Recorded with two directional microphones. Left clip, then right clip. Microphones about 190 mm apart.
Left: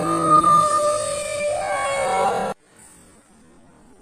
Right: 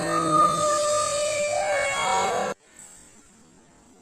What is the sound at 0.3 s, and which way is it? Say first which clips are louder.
Music: left 5 dB; 35° right (ahead or behind).